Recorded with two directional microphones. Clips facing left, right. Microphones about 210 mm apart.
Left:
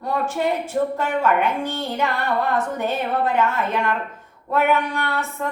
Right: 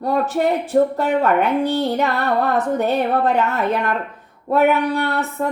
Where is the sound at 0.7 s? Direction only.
55° right (ahead or behind).